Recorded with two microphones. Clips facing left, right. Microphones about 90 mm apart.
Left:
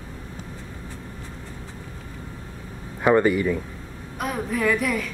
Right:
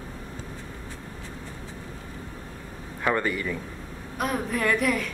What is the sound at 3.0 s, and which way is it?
Speech, 20° left (ahead or behind).